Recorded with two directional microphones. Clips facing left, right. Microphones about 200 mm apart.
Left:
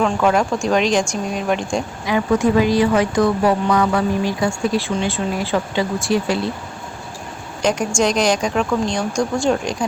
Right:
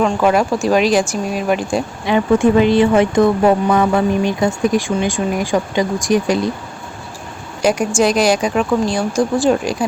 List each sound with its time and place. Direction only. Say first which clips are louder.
0.0 s a woman's voice: right 2 dB; 10° right (ahead or behind)
2.1 s speech: right 4 dB; 25° right (ahead or behind)
7.6 s a woman's voice: right 3 dB; 10° right (ahead or behind)